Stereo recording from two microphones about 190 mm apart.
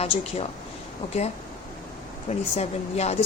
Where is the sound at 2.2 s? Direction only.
35° left (ahead or behind).